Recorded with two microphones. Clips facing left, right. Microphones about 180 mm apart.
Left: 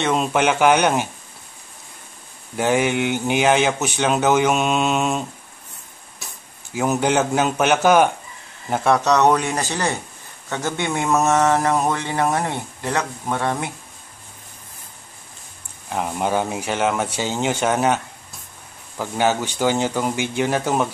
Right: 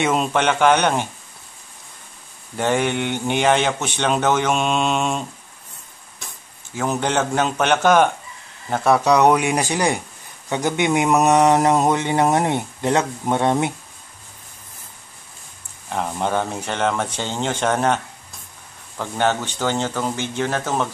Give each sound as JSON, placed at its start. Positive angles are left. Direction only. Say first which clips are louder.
{"t": 0.0, "sound": "speech", "louder": "even", "side_deg": 0}
{"t": 2.5, "sound": "a man's voice", "louder": "left 1 dB", "side_deg": 5}
{"t": 6.7, "sound": "speech", "louder": "left 2 dB", "side_deg": 10}
{"t": 8.8, "sound": "speech", "louder": "right 1 dB", "side_deg": -5}
{"t": 15.9, "sound": "speech", "louder": "left 1 dB", "side_deg": 5}